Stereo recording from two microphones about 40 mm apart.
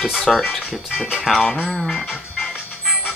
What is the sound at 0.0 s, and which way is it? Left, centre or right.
Speech, centre.